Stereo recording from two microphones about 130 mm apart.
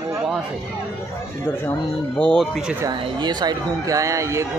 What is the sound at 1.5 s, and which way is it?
Speech, 15° left (ahead or behind).